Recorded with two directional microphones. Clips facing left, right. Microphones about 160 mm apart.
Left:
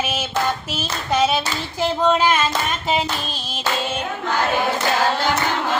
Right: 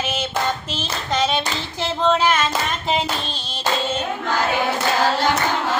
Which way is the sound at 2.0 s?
10° left (ahead or behind).